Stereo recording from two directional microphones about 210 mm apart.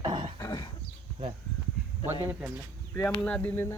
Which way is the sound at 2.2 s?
10° right (ahead or behind).